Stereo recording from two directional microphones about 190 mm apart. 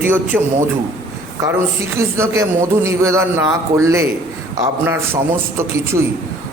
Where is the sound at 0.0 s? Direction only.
10° right (ahead or behind).